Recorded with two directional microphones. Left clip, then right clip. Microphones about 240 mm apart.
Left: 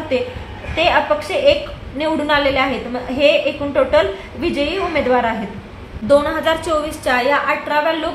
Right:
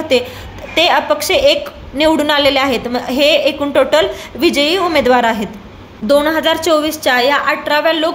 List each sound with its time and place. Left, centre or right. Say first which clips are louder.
0.7 s a woman's voice: right 3 dB; right
6.0 s a woman's voice: right 2 dB; right